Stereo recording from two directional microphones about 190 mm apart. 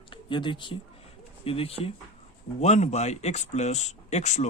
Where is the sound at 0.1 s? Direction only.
25° left (ahead or behind).